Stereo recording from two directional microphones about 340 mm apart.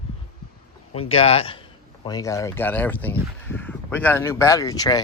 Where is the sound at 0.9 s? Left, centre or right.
Centre.